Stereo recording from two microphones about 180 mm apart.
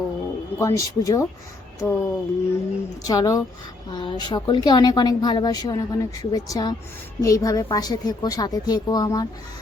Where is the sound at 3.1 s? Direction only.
20° left (ahead or behind).